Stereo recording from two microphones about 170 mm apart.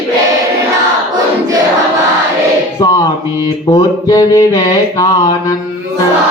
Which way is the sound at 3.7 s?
20° left (ahead or behind).